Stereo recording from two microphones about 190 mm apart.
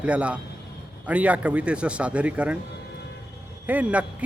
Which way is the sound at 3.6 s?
10° right (ahead or behind).